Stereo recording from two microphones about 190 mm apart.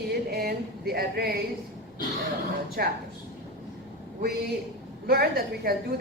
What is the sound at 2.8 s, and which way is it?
Speech, 50° right (ahead or behind).